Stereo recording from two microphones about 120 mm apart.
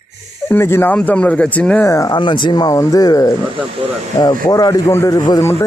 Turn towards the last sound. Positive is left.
turn(degrees=20)  # may be behind; listen again after turning